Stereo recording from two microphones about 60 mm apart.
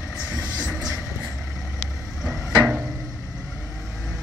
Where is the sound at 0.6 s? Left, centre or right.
Centre.